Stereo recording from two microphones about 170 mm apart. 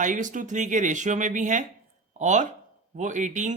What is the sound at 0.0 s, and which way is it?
Speech, 50° right (ahead or behind).